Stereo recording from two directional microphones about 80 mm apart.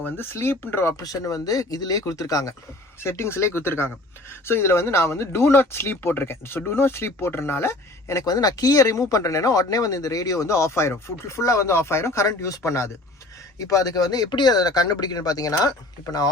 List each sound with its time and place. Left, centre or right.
0.3 s speech: left
0.9 s speech: left
3.0 s speech: left
8.2 s speech: left